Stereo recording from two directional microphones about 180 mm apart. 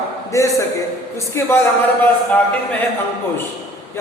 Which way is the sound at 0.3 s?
15° left (ahead or behind).